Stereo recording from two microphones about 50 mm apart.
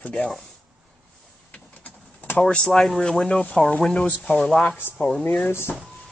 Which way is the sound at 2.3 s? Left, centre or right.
Centre.